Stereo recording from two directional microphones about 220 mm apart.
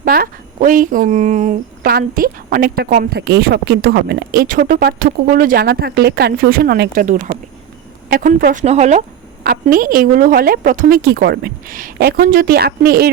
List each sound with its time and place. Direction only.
0.0 s a woman's voice: 40° right (ahead or behind)